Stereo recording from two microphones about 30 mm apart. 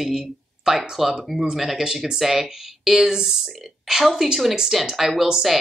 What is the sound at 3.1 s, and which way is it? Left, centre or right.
Speech, right.